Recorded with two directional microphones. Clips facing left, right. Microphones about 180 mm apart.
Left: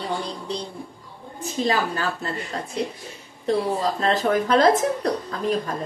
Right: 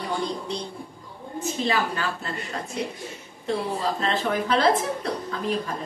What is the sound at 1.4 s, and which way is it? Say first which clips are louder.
A woman's voice: left 2 dB; 35° left (ahead or behind).